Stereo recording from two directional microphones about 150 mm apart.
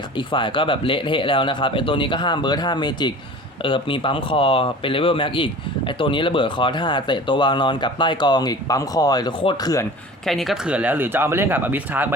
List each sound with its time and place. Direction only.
0.2 s speech: 35° left (ahead or behind)
10.2 s speech: centre (ahead or behind)